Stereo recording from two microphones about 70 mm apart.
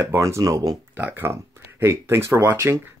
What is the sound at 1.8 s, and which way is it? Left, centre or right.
Speech, right.